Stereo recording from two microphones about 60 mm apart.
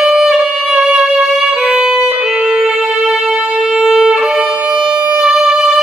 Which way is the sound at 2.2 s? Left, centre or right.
Centre.